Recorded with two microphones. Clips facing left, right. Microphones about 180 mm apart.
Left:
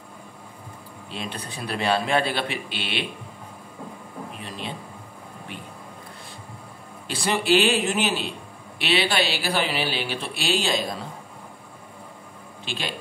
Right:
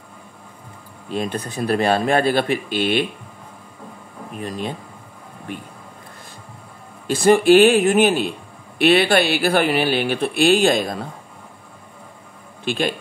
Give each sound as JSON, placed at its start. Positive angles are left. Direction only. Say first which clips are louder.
{"t": 1.0, "sound": "speech", "louder": "right 10 dB", "side_deg": -45}
{"t": 4.3, "sound": "speech", "louder": "right 10 dB", "side_deg": -45}
{"t": 7.1, "sound": "speech", "louder": "right 9 dB", "side_deg": -45}
{"t": 12.6, "sound": "speech", "louder": "right 11 dB", "side_deg": -50}